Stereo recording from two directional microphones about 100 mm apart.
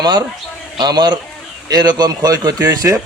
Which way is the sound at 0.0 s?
45° right (ahead or behind).